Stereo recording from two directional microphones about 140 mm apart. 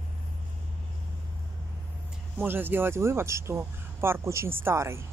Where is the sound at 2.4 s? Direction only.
15° right (ahead or behind).